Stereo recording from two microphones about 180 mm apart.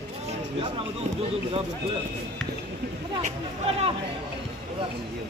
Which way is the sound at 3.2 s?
35° right (ahead or behind).